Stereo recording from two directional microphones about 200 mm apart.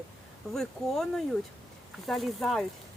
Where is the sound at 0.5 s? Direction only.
Centre (ahead or behind).